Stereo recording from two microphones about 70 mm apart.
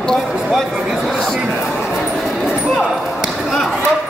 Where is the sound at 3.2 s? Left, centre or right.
Centre.